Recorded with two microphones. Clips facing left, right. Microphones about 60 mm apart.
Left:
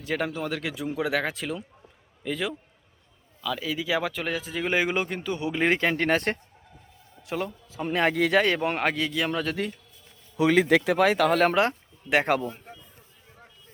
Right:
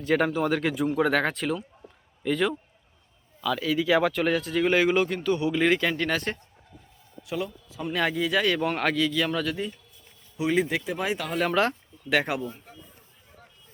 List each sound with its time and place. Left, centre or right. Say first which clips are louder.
0.0 s a man's voice: right 5 dB; centre
5.6 s speech: left 3 dB; left
8.1 s speech: left 3 dB; left
8.5 s speech: right 1 dB; left
10.3 s speech: left 5 dB; left
11.5 s speech: left 1 dB; centre
12.4 s speech: left 1 dB; left